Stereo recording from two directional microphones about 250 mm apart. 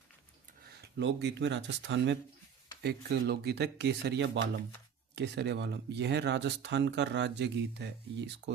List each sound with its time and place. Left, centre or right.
0.8 s speech: right